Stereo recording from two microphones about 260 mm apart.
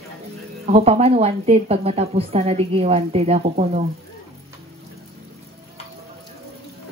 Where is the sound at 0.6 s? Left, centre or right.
Right.